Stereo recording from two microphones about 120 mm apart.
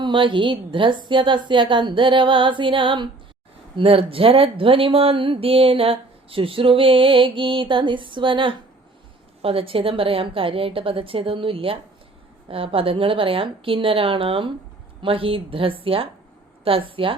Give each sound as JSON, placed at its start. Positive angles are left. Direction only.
{"t": 0.0, "sound": "speech", "side_deg": -45}